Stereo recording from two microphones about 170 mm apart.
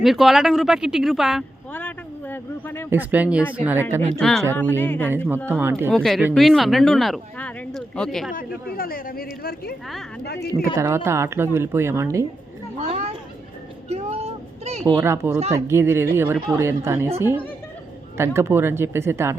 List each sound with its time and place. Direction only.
0.0 s speech: centre (ahead or behind)
1.7 s a sound: 10° left (ahead or behind)
2.9 s speech: 10° right (ahead or behind)
4.2 s speech: centre (ahead or behind)
5.5 s speech: 15° right (ahead or behind)
5.9 s speech: centre (ahead or behind)
8.3 s speech: 55° left (ahead or behind)
10.2 s speech: 70° left (ahead or behind)
10.8 s speech: 15° right (ahead or behind)
13.8 s a sound: 40° right (ahead or behind)
14.8 s speech: 15° right (ahead or behind)